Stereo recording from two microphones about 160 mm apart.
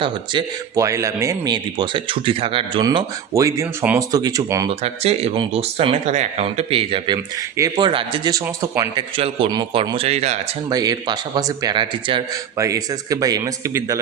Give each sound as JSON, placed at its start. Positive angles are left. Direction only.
{"t": 0.8, "sound": "speech", "side_deg": -20}
{"t": 2.8, "sound": "speech", "side_deg": -20}
{"t": 4.7, "sound": "speech", "side_deg": -40}
{"t": 9.1, "sound": "speech", "side_deg": -35}
{"t": 10.7, "sound": "speech", "side_deg": -25}
{"t": 12.5, "sound": "speech", "side_deg": -20}